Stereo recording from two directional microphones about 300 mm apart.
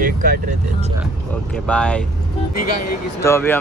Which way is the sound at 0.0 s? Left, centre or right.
Right.